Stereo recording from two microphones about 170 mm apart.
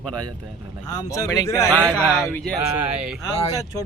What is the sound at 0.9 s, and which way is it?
Speech, 20° left (ahead or behind).